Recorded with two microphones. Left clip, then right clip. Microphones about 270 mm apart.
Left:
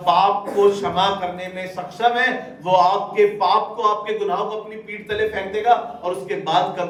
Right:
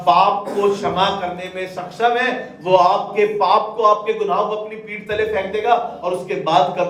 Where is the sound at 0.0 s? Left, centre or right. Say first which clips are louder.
Right 2 dB; left.